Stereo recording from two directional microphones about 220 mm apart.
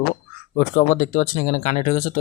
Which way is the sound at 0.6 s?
40° left (ahead or behind).